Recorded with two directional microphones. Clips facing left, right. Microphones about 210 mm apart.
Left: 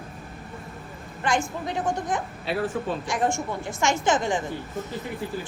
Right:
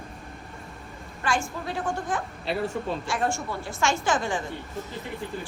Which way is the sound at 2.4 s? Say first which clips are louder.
Left 1 dB; centre (ahead or behind).